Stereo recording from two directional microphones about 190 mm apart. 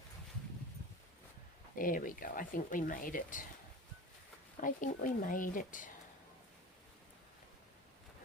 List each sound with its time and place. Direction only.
1.7 s speech: 45° left (ahead or behind)
4.6 s speech: 45° left (ahead or behind)